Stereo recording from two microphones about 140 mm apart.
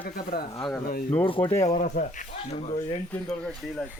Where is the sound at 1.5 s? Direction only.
25° left (ahead or behind).